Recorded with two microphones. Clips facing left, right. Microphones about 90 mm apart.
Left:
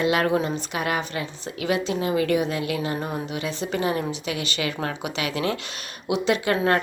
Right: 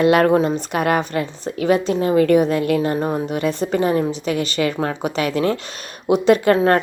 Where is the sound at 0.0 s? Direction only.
50° right (ahead or behind).